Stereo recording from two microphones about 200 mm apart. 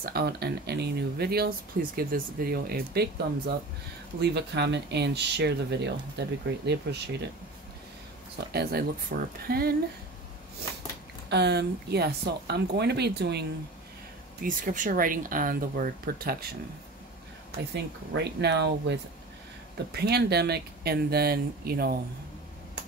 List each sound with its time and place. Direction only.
0.0 s speech: 50° right (ahead or behind)
4.2 s speech: 55° right (ahead or behind)
8.4 s speech: 50° right (ahead or behind)
11.2 s speech: 55° right (ahead or behind)
14.4 s speech: 40° right (ahead or behind)
17.7 s speech: 60° right (ahead or behind)